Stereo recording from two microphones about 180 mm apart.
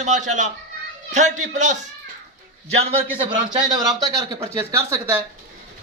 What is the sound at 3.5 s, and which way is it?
Speech, 25° right (ahead or behind).